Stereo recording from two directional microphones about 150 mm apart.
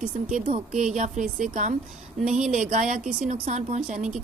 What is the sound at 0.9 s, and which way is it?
Speech, 55° right (ahead or behind).